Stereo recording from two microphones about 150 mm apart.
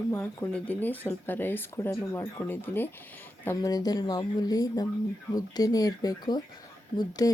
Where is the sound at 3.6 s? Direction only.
25° left (ahead or behind).